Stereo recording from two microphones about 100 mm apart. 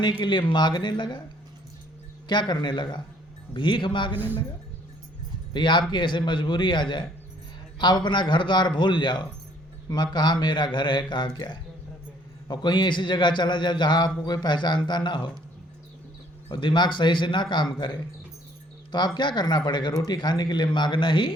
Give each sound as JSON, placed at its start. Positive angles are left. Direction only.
{"t": 0.0, "sound": "speech", "side_deg": 50}
{"t": 2.3, "sound": "speech", "side_deg": 50}
{"t": 5.5, "sound": "speech", "side_deg": 50}
{"t": 16.5, "sound": "speech", "side_deg": 50}